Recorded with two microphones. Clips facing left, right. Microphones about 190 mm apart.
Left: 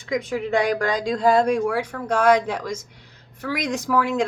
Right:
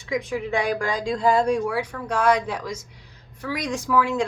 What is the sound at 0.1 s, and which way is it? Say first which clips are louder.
A woman's voice: left 2 dB; 40° left (ahead or behind).